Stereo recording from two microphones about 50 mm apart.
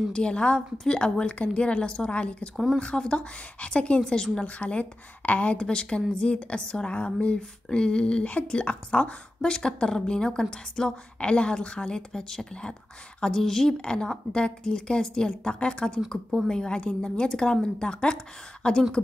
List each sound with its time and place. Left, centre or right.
0.1 s a woman's voice: centre
2.5 s speech: centre
2.8 s a woman's voice: centre
4.6 s a woman's voice: left; by 13.7 s centre
13.7 s a woman's voice: centre